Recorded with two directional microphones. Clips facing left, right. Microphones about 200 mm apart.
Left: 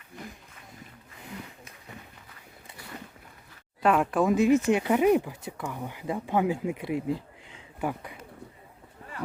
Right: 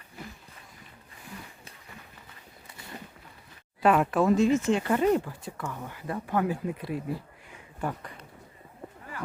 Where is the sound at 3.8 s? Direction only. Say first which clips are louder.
Right 1 dB; centre (ahead or behind).